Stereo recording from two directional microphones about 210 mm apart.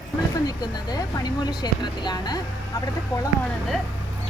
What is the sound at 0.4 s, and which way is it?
Speech, 20° left (ahead or behind).